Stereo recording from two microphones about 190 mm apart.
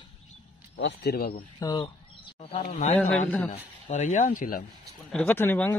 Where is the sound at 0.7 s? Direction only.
65° left (ahead or behind).